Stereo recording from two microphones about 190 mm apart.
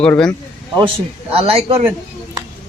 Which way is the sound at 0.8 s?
30° right (ahead or behind).